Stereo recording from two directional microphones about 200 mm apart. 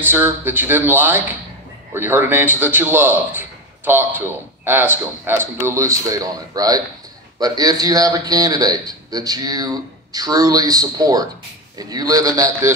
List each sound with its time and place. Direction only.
0.0 s a man's voice: 10° right (ahead or behind)